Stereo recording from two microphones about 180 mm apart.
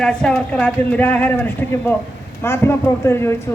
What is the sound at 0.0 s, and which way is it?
A man's voice, 5° left (ahead or behind).